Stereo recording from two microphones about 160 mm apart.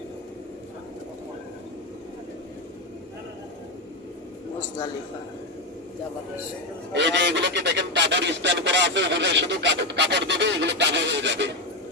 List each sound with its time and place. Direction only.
6.9 s goose: 90° right